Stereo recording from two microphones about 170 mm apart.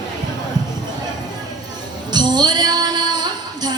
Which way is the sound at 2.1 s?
25° right (ahead or behind).